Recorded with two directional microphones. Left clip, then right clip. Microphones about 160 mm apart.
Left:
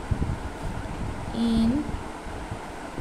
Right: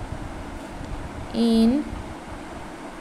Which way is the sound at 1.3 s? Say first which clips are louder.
Right 6 dB; 40° right (ahead or behind).